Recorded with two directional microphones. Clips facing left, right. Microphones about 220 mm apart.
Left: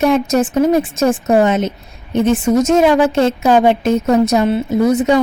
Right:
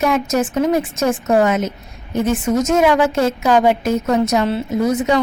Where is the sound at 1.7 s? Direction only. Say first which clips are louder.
Left 4 dB; 65° left (ahead or behind).